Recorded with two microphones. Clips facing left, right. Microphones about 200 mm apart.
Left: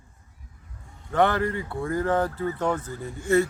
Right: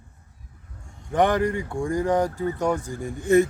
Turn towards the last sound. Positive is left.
turn(degrees=-15)  # may be behind; listen again after turning